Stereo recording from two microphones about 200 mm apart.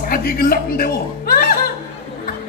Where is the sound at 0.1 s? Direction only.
50° left (ahead or behind).